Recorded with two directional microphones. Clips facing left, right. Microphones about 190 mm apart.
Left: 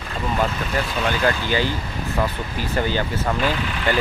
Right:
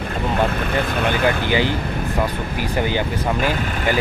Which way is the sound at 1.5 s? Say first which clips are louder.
Right 3 dB; 15° right (ahead or behind).